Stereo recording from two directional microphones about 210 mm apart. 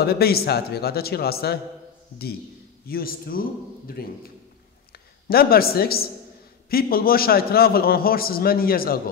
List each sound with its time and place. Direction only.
0.0 s a man's voice: 45° left (ahead or behind)
2.9 s a man's voice: 45° left (ahead or behind)
5.3 s a man's voice: 45° left (ahead or behind)